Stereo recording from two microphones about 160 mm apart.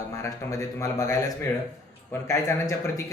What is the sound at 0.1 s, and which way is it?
A man's voice, 20° left (ahead or behind).